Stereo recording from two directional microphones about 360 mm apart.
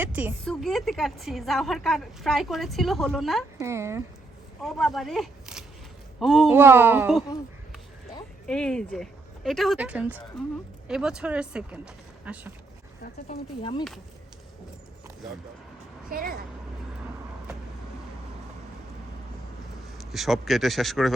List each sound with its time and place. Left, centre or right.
0.0 s a woman's voice: centre
13.0 s speech: centre
16.0 s a woman's voice: right
20.0 s a woman's voice: centre